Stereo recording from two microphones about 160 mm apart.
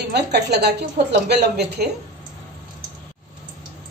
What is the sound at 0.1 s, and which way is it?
A woman's voice, 90° right.